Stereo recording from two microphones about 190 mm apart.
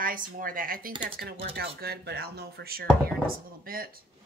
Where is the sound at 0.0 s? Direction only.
45° right (ahead or behind).